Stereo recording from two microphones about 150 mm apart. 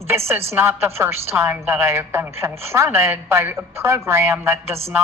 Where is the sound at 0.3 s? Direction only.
15° right (ahead or behind).